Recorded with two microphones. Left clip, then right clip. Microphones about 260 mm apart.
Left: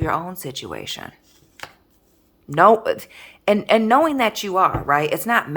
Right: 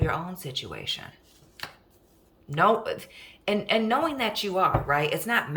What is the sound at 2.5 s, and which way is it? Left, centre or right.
A woman's voice, centre.